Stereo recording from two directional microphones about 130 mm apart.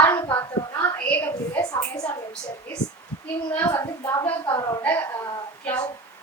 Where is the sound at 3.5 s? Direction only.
20° left (ahead or behind).